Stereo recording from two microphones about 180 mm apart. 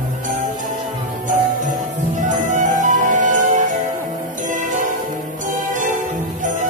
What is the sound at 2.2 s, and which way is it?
Music, 45° right (ahead or behind).